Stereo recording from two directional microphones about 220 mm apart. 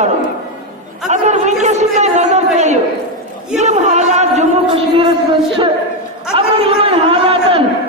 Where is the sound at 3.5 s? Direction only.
30° right (ahead or behind).